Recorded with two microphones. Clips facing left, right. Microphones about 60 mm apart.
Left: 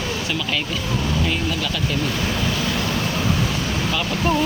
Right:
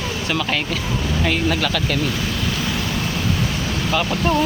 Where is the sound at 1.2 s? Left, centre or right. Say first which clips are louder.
Right 4 dB; right.